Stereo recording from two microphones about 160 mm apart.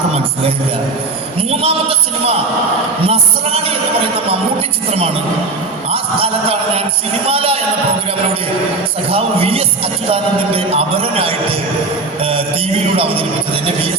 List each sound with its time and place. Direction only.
1.4 s music: 35° right (ahead or behind)
4.9 s a woman's voice: 35° right (ahead or behind)
9.0 s music: 35° right (ahead or behind)